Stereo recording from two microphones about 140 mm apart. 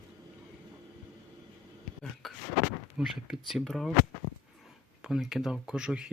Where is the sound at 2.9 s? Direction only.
5° right (ahead or behind).